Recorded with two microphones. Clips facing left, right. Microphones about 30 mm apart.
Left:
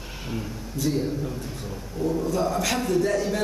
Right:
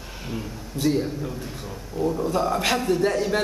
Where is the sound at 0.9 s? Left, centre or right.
Centre.